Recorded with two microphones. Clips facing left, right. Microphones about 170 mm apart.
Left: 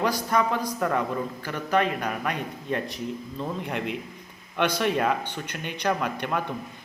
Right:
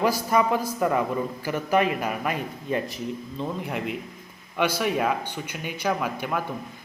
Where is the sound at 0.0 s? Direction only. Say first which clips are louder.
Right 2 dB; 5° right (ahead or behind).